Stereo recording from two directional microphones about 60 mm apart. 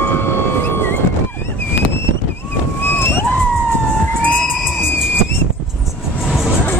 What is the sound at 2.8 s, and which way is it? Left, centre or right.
Boat, left.